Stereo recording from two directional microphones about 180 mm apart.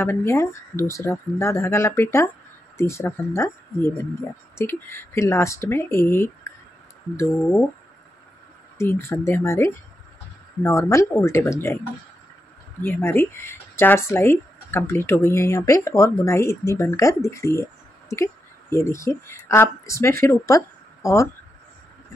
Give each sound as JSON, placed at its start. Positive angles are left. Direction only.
{"t": 0.0, "sound": "speech", "side_deg": 15}
{"t": 8.7, "sound": "speech", "side_deg": 15}
{"t": 12.8, "sound": "a woman's voice", "side_deg": 10}